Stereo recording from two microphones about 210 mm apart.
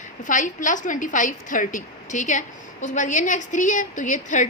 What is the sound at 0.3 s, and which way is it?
A woman's voice, 35° left (ahead or behind).